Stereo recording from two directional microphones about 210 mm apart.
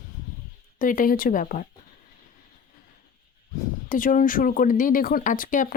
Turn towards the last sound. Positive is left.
turn(degrees=40)  # may be behind; listen again after turning